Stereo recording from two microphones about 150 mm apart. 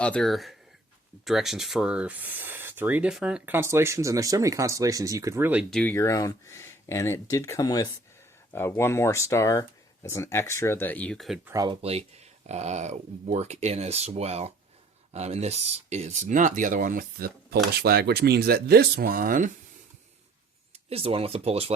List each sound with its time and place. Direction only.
0.0 s speech: 5° left (ahead or behind); by 5.6 s 15° right (ahead or behind)
5.7 s speech: 15° left (ahead or behind)
11.4 s speech: 25° right (ahead or behind)
11.7 s speech: 40° right (ahead or behind); by 19.5 s 70° right (ahead or behind)
20.9 s speech: 40° right (ahead or behind)